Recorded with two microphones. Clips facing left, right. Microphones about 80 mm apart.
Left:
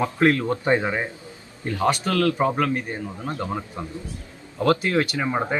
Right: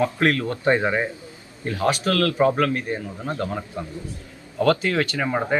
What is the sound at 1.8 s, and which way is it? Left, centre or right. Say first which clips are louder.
Speech: even; left.